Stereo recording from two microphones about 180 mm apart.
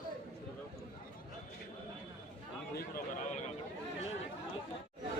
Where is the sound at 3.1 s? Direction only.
45° left (ahead or behind).